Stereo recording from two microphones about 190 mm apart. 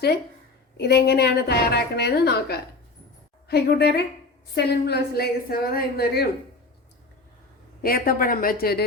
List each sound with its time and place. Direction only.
0.8 s a woman's voice: 60° left (ahead or behind)
7.8 s a woman's voice: 50° left (ahead or behind)